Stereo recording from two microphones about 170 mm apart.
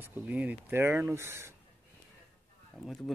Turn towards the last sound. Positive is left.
turn(degrees=0)  # may be behind; listen again after turning